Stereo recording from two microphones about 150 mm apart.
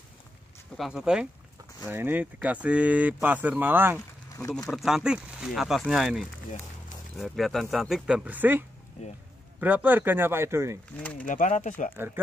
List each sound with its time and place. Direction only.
0.7 s speech: 5° right (ahead or behind)
4.3 s speech: 25° left (ahead or behind)
4.6 s speech: centre (ahead or behind); by 10.8 s 20° right (ahead or behind)
11.0 s speech: 10° left (ahead or behind)
11.2 s speech: 60° left (ahead or behind)
12.0 s speech: 15° right (ahead or behind)